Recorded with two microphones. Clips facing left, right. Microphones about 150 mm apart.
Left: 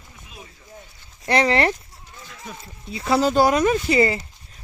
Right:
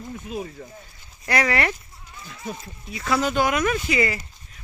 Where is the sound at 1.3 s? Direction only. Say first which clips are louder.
Left 4 dB; 25° left (ahead or behind).